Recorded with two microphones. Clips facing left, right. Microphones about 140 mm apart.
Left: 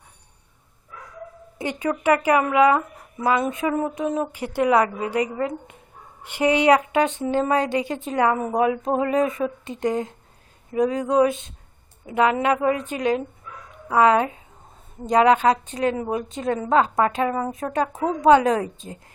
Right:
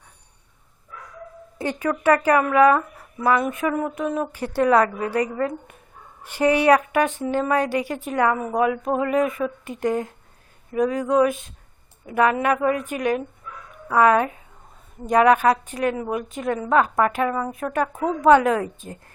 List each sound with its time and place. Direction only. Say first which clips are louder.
1.5 s speech: right 1 dB; 20° left (ahead or behind)
13.7 s a sound: even; 25° left (ahead or behind)
15.0 s speech: even; 25° left (ahead or behind)
18.0 s speech: even; 20° left (ahead or behind)